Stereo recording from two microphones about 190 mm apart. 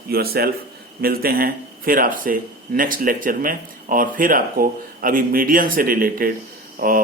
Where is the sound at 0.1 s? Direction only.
55° right (ahead or behind).